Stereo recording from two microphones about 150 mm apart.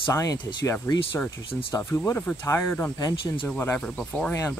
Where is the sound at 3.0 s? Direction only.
30° left (ahead or behind).